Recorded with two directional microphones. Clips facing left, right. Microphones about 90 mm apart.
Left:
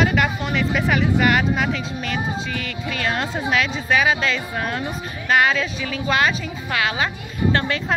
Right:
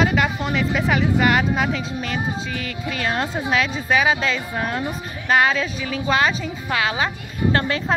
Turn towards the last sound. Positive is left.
turn(degrees=-30)  # may be behind; listen again after turning